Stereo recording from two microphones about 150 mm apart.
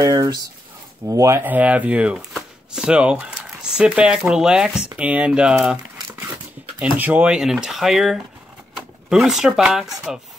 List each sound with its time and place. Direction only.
0.0 s speech: 25° right (ahead or behind); by 5.8 s 5° right (ahead or behind)
6.8 s speech: 10° right (ahead or behind)